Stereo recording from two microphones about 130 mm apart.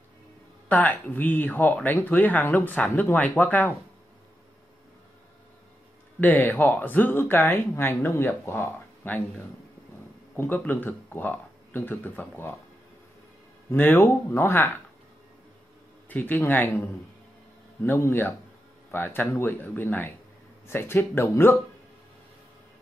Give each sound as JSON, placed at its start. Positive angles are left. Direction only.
{"t": 0.7, "sound": "speech", "side_deg": 10}
{"t": 6.2, "sound": "speech", "side_deg": 15}
{"t": 10.3, "sound": "speech", "side_deg": 15}
{"t": 13.7, "sound": "speech", "side_deg": 15}
{"t": 16.1, "sound": "speech", "side_deg": 15}